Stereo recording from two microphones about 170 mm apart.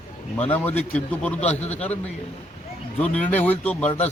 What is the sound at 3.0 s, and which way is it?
Speech, 10° left (ahead or behind).